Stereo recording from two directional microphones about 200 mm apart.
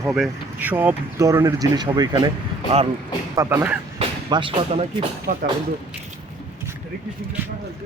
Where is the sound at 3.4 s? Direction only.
10° right (ahead or behind).